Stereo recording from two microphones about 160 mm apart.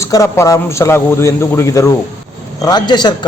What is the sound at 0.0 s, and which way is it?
A man's voice, 20° left (ahead or behind).